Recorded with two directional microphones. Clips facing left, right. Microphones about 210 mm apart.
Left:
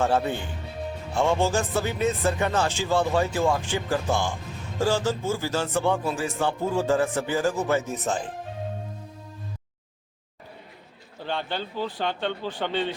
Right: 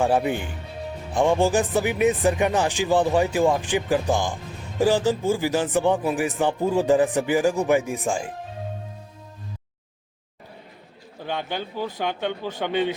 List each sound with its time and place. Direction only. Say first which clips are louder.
0.0 s speech: right 3 dB; 15° right (ahead or behind)
11.2 s speech: right 1 dB; 15° right (ahead or behind)